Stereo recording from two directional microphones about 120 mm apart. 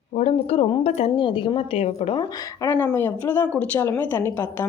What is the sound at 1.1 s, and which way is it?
A woman's voice, 45° left (ahead or behind).